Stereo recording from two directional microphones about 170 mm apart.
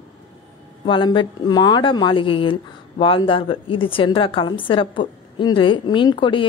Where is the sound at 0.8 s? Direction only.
30° left (ahead or behind).